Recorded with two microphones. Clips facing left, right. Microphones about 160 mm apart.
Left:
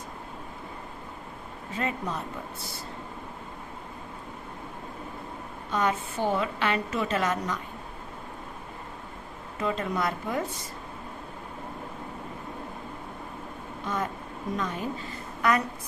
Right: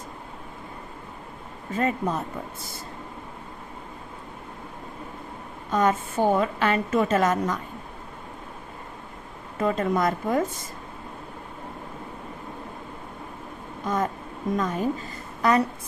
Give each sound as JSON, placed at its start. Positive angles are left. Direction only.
{"t": 1.7, "sound": "a woman's voice", "side_deg": -45}
{"t": 5.7, "sound": "a woman's voice", "side_deg": -45}
{"t": 9.6, "sound": "a woman's voice", "side_deg": -45}
{"t": 13.8, "sound": "a woman's voice", "side_deg": -45}
{"t": 15.4, "sound": "a woman's voice", "side_deg": -30}